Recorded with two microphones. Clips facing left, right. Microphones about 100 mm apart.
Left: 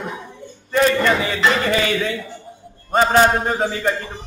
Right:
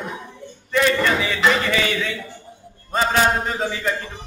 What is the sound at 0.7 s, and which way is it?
A man's voice, 40° left (ahead or behind).